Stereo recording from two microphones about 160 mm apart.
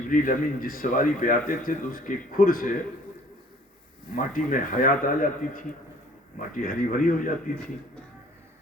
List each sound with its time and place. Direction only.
0.1 s speech: 60° left (ahead or behind)
4.1 s speech: 60° left (ahead or behind)